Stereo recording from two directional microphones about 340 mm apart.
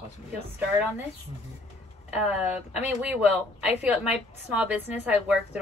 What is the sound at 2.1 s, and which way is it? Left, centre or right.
Speech, centre.